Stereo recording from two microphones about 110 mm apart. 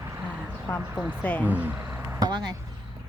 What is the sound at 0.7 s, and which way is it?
Speech, 20° left (ahead or behind).